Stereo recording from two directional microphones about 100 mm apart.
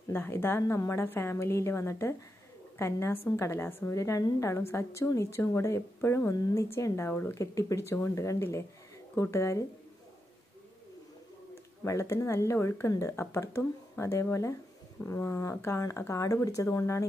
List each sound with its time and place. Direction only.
0.1 s a woman's voice: 25° left (ahead or behind)
11.8 s a woman's voice: 30° left (ahead or behind)